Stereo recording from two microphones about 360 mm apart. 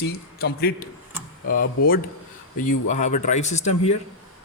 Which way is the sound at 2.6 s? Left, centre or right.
Centre.